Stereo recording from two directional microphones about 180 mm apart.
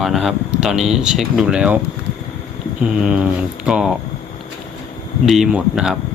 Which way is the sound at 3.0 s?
5° right (ahead or behind).